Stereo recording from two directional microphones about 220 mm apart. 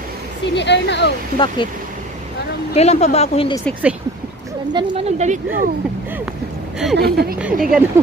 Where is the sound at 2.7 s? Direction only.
30° left (ahead or behind).